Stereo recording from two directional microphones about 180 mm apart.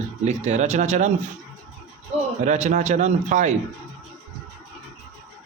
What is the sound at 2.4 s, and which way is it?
Speech, 40° right (ahead or behind).